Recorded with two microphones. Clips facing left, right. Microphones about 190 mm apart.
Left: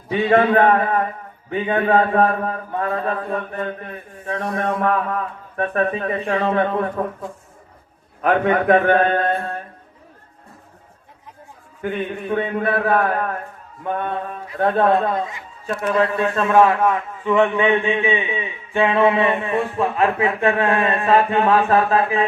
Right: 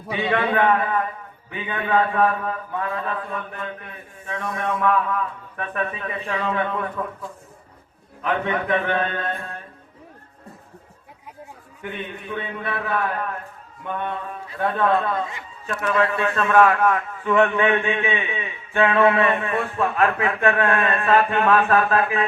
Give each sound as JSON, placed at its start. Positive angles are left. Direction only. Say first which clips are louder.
{"t": 0.1, "sound": "a man's voice", "louder": "left 7 dB", "side_deg": 40}
{"t": 8.2, "sound": "a man's voice", "louder": "left 7 dB", "side_deg": 50}
{"t": 11.8, "sound": "a man's voice", "louder": "left 8 dB", "side_deg": 45}
{"t": 15.7, "sound": "a man's voice", "louder": "left 3 dB", "side_deg": 25}